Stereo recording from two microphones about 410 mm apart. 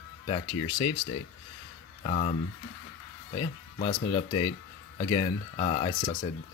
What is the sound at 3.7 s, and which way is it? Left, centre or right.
Speech, centre.